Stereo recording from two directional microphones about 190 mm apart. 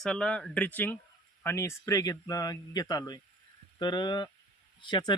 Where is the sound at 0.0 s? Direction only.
5° left (ahead or behind).